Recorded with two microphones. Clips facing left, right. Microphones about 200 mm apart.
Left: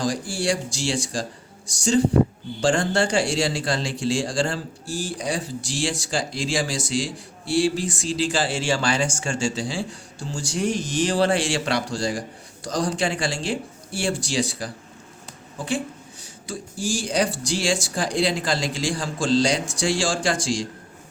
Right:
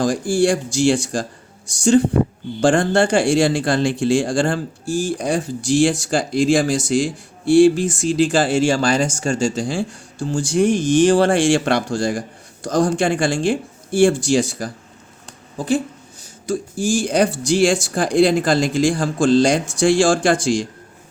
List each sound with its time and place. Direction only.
0.0 s a woman's voice: 50° right (ahead or behind)